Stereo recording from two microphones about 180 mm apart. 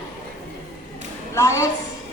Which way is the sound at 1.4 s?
15° left (ahead or behind).